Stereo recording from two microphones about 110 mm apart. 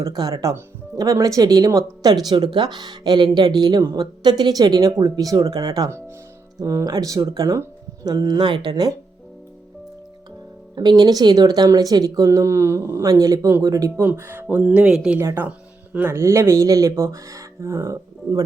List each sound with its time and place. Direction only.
0.0 s speech: 35° right (ahead or behind)
10.8 s speech: 35° right (ahead or behind)
14.5 s speech: 10° right (ahead or behind)
15.2 s speech: 25° right (ahead or behind)
15.4 s music: 15° right (ahead or behind)
16.1 s speech: 25° right (ahead or behind)